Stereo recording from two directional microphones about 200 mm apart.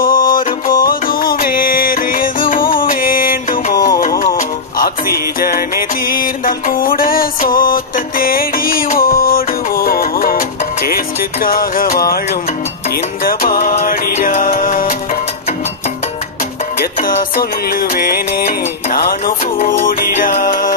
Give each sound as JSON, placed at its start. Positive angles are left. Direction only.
{"t": 0.0, "sound": "music", "side_deg": 45}
{"t": 13.2, "sound": "music", "side_deg": 45}
{"t": 17.0, "sound": "music", "side_deg": 45}